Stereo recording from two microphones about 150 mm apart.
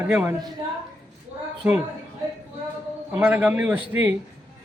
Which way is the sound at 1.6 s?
10° right (ahead or behind).